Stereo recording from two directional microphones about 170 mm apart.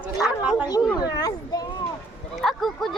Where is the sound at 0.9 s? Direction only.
25° left (ahead or behind).